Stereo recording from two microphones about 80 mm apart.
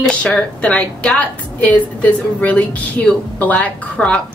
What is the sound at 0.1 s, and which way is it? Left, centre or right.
A woman's voice, centre.